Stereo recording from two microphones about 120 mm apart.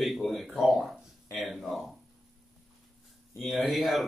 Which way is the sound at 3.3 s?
Centre (ahead or behind).